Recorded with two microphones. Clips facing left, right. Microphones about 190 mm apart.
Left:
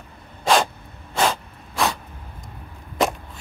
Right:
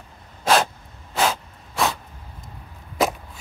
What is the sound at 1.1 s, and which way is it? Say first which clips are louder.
Gasp: left 1 dB; centre (ahead or behind).